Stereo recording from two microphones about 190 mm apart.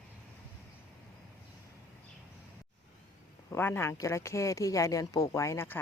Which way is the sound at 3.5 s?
10° left (ahead or behind).